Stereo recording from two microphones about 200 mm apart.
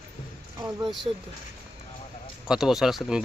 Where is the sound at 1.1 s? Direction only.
25° right (ahead or behind).